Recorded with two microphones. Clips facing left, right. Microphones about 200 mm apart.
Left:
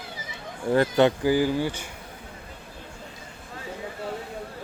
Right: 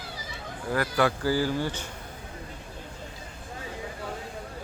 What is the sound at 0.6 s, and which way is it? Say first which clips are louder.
Speech: left 6 dB; 25° left (ahead or behind).